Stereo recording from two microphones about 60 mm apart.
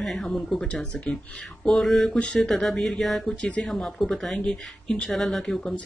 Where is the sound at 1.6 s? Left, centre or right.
Centre.